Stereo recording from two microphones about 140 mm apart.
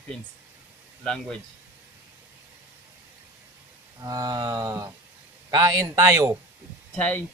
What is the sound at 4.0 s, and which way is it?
Speech, 25° right (ahead or behind).